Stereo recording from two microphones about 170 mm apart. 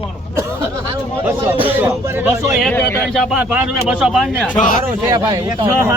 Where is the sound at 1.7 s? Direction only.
10° right (ahead or behind).